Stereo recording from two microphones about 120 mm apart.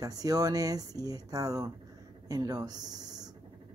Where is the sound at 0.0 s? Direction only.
30° right (ahead or behind).